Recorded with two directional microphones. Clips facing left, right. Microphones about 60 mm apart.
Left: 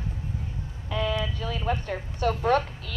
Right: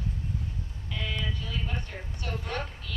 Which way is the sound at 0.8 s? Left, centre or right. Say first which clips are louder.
Left 7 dB; left.